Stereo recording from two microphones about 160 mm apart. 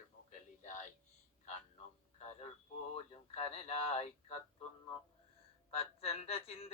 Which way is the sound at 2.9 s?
40° left (ahead or behind).